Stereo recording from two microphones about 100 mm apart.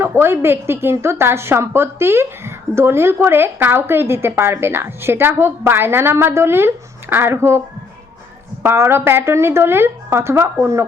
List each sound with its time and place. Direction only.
0.0 s a woman's voice: 25° right (ahead or behind)
8.6 s a woman's voice: 25° right (ahead or behind)